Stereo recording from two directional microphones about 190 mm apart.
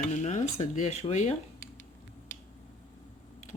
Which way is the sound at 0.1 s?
40° left (ahead or behind).